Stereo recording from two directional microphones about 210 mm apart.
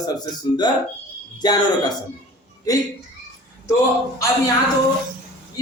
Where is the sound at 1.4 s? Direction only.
20° left (ahead or behind).